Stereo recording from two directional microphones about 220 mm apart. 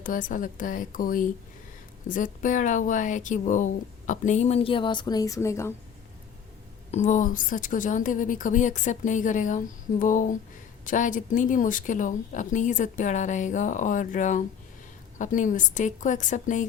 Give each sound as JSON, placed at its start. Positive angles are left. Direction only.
{"t": 0.0, "sound": "speech", "side_deg": 35}
{"t": 6.9, "sound": "speech", "side_deg": 35}